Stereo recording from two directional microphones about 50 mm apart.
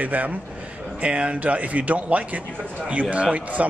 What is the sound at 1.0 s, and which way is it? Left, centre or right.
Speech, right.